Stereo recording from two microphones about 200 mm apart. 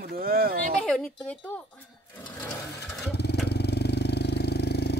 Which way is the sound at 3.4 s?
55° left (ahead or behind).